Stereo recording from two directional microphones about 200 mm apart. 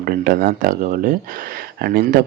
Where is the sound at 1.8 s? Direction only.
50° right (ahead or behind).